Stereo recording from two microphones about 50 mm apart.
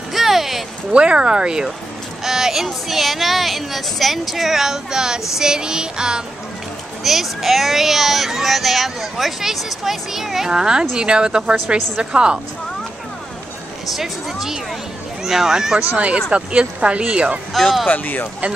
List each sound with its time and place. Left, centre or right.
0.1 s a sound: centre
0.9 s music: right
2.2 s a child's voice: centre
5.4 s music: centre
7.0 s a child's voice: centre
13.9 s a child's voice: centre
15.2 s music: centre
16.3 s speech: right
17.6 s a child's voice: centre
17.8 s speech: left